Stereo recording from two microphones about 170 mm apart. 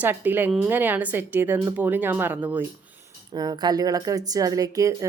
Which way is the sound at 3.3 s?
25° right (ahead or behind).